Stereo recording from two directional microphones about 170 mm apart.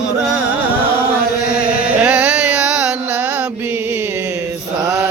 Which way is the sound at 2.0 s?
10° right (ahead or behind).